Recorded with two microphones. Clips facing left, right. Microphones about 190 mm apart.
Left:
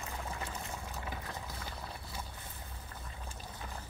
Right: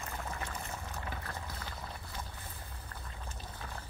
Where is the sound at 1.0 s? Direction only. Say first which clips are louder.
Even; 5° left (ahead or behind).